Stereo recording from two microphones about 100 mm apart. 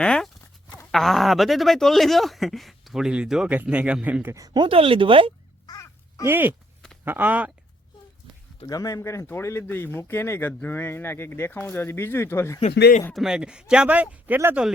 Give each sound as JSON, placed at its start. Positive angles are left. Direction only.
{"t": 0.0, "sound": "speech", "side_deg": 10}
{"t": 4.4, "sound": "speech", "side_deg": -40}
{"t": 4.6, "sound": "speech", "side_deg": -65}
{"t": 5.6, "sound": "crow", "side_deg": 35}
{"t": 6.2, "sound": "speech", "side_deg": -20}
{"t": 8.6, "sound": "speech", "side_deg": 35}
{"t": 13.1, "sound": "speech", "side_deg": -5}